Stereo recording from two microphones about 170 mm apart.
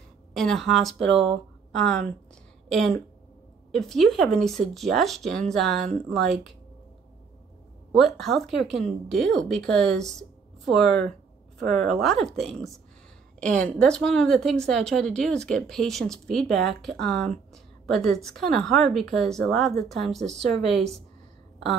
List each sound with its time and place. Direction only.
0.3 s a woman's voice: centre (ahead or behind)
3.7 s a woman's voice: centre (ahead or behind)
5.9 s speech: 40° right (ahead or behind)
7.9 s a woman's voice: centre (ahead or behind)